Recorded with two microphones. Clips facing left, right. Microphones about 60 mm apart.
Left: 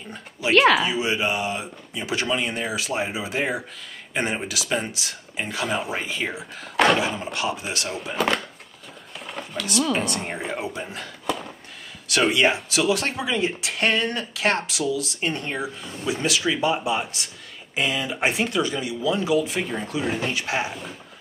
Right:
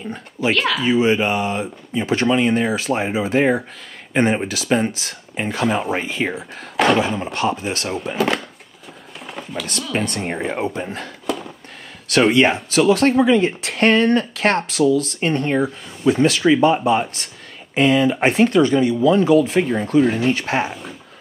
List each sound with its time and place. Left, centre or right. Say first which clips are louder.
0.1 s speech: left 1 dB; right
6.8 s speech: right 3 dB; centre
7.3 s speech: right 6 dB; right
8.1 s speech: right 3 dB; centre
9.2 s a sound: right 3 dB; centre
9.9 s speech: right 4 dB; right
12.1 s speech: right 5 dB; right